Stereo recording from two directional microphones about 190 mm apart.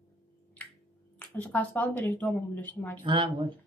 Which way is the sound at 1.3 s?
10° left (ahead or behind).